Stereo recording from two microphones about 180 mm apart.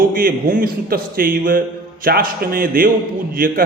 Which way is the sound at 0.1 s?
50° right (ahead or behind).